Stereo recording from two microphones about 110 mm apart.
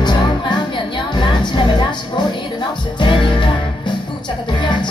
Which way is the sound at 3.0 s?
50° left (ahead or behind).